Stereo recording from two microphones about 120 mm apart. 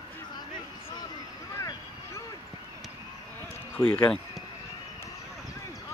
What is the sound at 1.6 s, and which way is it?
Vehicle, 25° left (ahead or behind).